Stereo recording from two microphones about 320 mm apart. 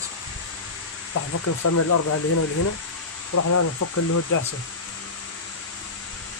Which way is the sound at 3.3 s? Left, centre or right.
Left.